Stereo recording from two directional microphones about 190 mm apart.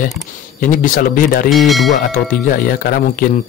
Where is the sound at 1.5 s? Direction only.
Centre (ahead or behind).